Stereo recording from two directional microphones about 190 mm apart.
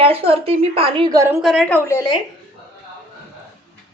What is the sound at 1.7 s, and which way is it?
Speech, 15° left (ahead or behind).